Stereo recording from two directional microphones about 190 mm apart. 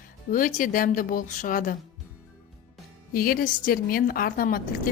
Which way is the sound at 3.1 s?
50° left (ahead or behind).